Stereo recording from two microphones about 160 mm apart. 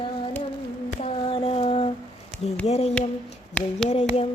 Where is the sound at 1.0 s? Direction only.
35° left (ahead or behind).